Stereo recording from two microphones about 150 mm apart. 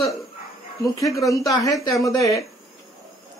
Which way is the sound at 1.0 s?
20° left (ahead or behind).